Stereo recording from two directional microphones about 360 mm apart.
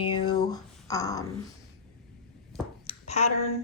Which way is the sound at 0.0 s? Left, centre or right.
Centre.